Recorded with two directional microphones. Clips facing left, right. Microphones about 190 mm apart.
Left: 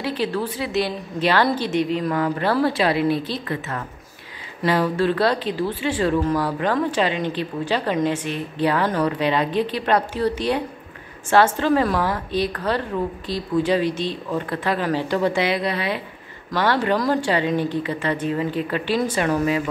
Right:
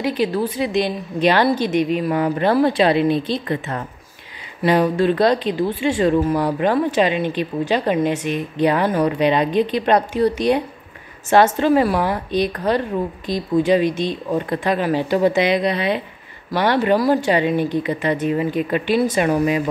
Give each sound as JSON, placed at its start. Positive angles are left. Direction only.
{"t": 0.0, "sound": "a woman's voice", "side_deg": -15}